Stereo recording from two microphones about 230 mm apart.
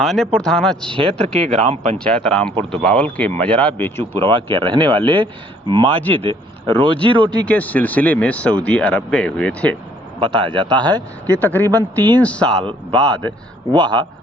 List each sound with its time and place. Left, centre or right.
0.0 s speech: centre
0.9 s speech: right
2.0 s speech: centre
4.2 s speech: right
7.3 s speech: centre
10.2 s speech: right
11.3 s speech: centre
13.7 s speech: centre